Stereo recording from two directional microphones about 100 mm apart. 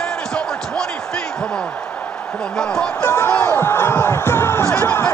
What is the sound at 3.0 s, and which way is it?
Music, 25° left (ahead or behind).